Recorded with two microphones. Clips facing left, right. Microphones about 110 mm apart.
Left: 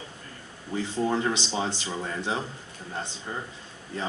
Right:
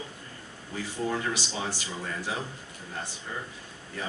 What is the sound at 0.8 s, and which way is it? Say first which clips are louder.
Speech: left 4 dB; 20° left (ahead or behind).